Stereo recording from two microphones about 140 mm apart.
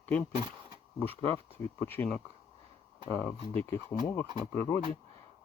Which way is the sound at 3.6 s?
20° left (ahead or behind).